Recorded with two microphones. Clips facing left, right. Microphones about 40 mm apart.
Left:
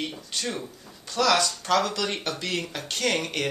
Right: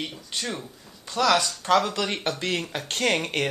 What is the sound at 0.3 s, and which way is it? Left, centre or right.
Speech, centre.